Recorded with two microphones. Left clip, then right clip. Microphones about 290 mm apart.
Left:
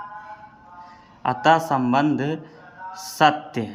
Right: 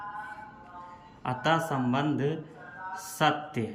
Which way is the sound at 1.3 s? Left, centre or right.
Centre.